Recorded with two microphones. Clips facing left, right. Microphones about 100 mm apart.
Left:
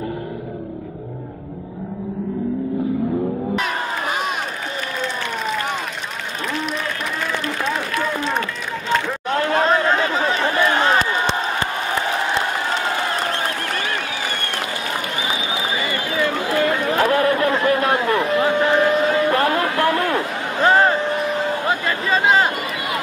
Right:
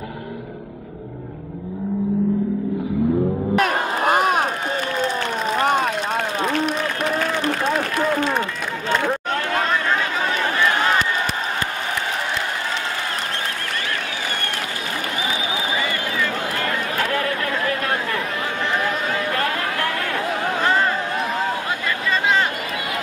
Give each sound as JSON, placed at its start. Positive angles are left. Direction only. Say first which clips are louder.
{"t": 3.5, "sound": "crowd", "louder": "right 3 dB", "side_deg": -50}
{"t": 5.0, "sound": "a sound", "louder": "right 2 dB", "side_deg": -45}
{"t": 9.4, "sound": "chatter", "louder": "left 9 dB", "side_deg": 30}
{"t": 16.6, "sound": "chatter", "louder": "left 7 dB", "side_deg": 30}
{"t": 19.3, "sound": "chatter", "louder": "left 5 dB", "side_deg": 20}
{"t": 20.6, "sound": "a sound", "louder": "left 7 dB", "side_deg": 45}